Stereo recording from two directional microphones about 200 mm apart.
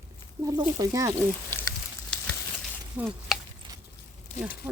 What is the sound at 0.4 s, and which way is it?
Speech, 15° right (ahead or behind).